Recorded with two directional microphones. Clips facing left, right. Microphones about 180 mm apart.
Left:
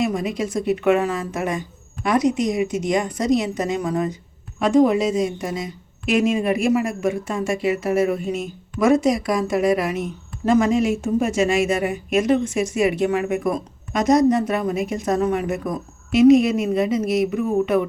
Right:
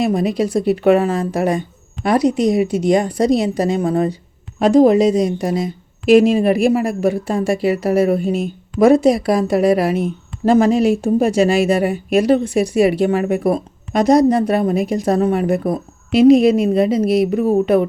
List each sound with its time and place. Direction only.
0.0 s a woman's voice: 35° right (ahead or behind)